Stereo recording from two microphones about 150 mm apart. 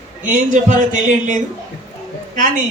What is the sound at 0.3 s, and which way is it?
Speech, 55° right (ahead or behind).